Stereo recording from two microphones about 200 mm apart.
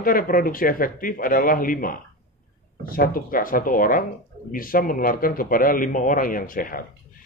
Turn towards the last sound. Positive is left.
turn(degrees=45)  # may be behind; listen again after turning